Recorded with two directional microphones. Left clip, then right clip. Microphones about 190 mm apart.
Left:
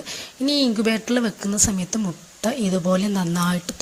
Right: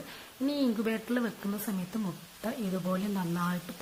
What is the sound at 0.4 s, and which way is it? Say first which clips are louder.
Speech: left 10 dB; 30° left (ahead or behind).